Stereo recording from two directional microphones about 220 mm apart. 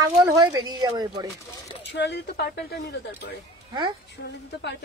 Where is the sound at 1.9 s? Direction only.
50° left (ahead or behind).